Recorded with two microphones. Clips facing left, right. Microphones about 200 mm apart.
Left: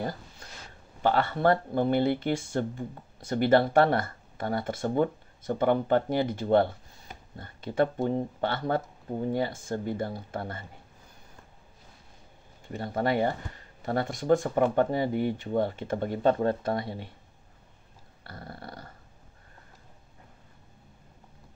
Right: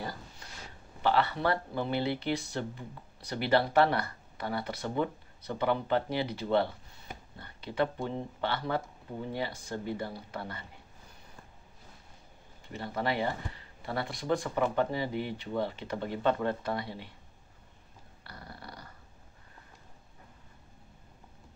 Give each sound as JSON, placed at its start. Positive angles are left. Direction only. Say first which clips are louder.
{"t": 1.0, "sound": "speech", "louder": "left 4 dB", "side_deg": 50}
{"t": 12.7, "sound": "speech", "louder": "left 5 dB", "side_deg": 50}
{"t": 18.2, "sound": "dog", "louder": "left 5 dB", "side_deg": 50}